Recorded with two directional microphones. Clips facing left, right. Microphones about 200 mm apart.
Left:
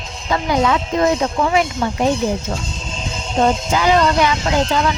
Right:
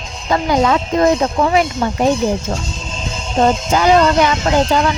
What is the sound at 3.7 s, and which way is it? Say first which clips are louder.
Speech: right 3 dB; 45° right (ahead or behind).